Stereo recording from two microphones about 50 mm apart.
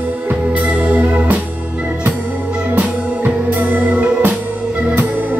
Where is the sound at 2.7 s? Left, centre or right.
Right.